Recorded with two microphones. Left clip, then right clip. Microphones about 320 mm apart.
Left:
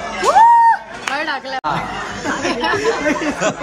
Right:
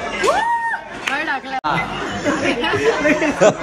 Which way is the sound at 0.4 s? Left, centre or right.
Left.